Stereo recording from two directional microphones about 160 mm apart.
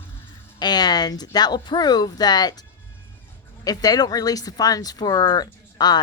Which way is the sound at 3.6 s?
25° left (ahead or behind).